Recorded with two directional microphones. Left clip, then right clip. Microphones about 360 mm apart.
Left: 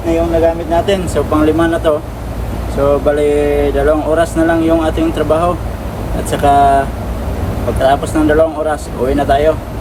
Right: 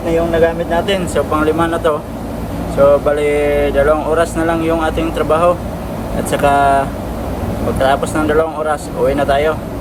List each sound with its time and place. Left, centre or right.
0.7 s speech: centre